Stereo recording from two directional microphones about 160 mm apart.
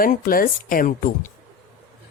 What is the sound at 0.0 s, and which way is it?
Speech, 60° left (ahead or behind).